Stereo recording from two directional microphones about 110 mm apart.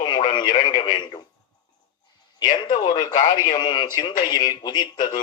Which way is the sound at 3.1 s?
90° left.